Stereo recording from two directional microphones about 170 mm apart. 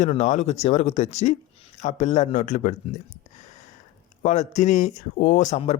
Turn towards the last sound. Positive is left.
turn(degrees=40)  # may be behind; listen again after turning